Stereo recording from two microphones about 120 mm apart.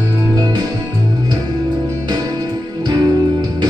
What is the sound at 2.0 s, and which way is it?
Music, 35° right (ahead or behind).